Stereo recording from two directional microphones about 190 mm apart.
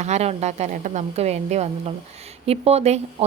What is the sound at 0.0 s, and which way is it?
A woman's voice, 35° right (ahead or behind).